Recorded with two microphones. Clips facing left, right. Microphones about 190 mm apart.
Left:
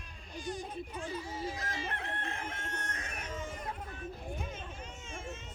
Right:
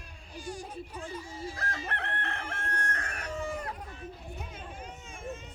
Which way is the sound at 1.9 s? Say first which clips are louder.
Right 3 dB; 65° right (ahead or behind).